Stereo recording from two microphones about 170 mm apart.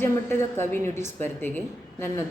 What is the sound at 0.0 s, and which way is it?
Speech, 15° left (ahead or behind).